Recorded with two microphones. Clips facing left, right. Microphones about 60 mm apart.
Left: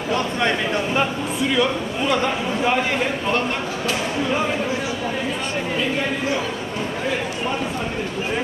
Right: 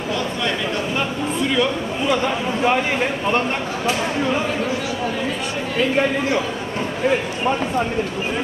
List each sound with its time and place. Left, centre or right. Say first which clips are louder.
0.1 s a sound: left 3 dB; left
1.5 s a man's voice: even; centre
2.6 s a man's voice: right 2 dB; centre